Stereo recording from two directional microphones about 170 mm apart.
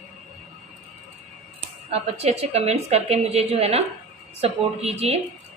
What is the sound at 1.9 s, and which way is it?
A woman's voice, 40° right (ahead or behind).